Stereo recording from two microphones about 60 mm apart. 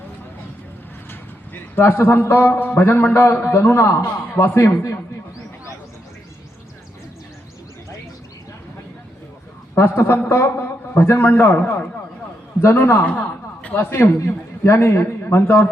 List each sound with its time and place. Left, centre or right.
1.7 s a man's voice: left
9.7 s a man's voice: left
12.6 s a man's voice: left
12.9 s a woman's voice: left
13.9 s a man's voice: left